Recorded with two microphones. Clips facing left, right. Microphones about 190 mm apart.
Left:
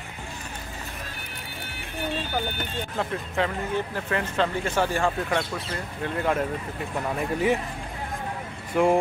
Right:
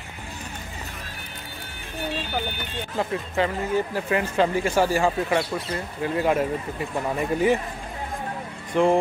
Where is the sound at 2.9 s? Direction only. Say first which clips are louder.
Right 4 dB; 5° right (ahead or behind).